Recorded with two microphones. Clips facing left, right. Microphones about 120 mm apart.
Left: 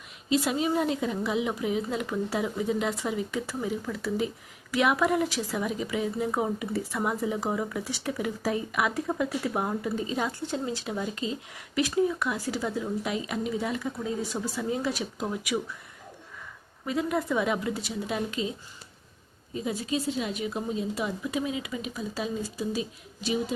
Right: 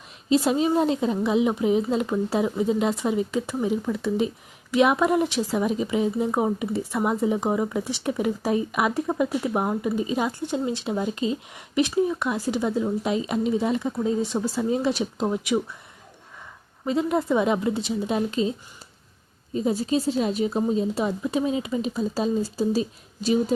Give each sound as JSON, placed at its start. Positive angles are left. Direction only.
{"t": 0.3, "sound": "a woman's voice", "side_deg": -30}
{"t": 16.8, "sound": "a woman's voice", "side_deg": -25}
{"t": 19.5, "sound": "a woman's voice", "side_deg": -35}